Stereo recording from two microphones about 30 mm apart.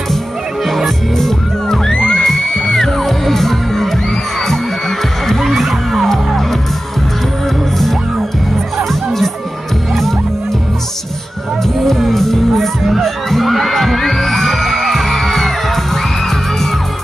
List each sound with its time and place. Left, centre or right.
0.7 s music: centre
1.1 s music: centre
2.0 s music: left
2.2 s music: centre
4.4 s heart sounds: centre
5.5 s music: centre
6.0 s music: centre
8.7 s music: centre
12.1 s music: centre